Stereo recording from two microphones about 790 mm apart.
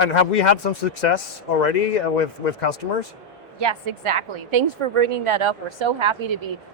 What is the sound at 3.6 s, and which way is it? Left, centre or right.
A woman's voice, right.